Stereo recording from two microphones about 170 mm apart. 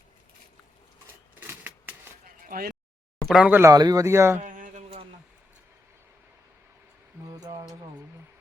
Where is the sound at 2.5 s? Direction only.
60° right (ahead or behind).